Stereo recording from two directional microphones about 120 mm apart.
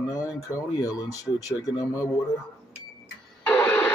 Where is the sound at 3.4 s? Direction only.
10° left (ahead or behind).